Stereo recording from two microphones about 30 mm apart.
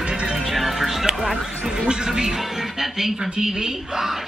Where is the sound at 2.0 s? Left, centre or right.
Centre.